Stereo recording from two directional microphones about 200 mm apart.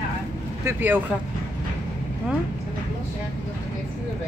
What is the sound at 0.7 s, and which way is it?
Speech, 10° right (ahead or behind).